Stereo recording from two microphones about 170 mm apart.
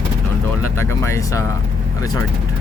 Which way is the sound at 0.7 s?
15° left (ahead or behind).